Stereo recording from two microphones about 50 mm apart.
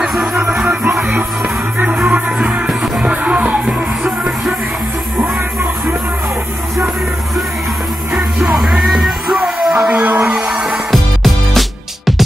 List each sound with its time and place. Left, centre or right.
0.1 s music: centre
0.7 s music: right
2.0 s music: right
2.3 s music: right
5.2 s music: right
8.1 s music: centre
9.6 s a sound: centre
10.0 s a sound: right
10.4 s music: centre
10.9 s music: centre